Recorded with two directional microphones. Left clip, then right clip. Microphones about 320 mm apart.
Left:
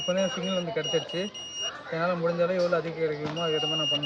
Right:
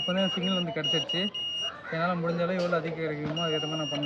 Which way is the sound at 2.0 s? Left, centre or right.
Centre.